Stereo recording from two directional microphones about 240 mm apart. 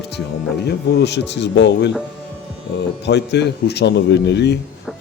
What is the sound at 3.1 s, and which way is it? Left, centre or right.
Speech, left.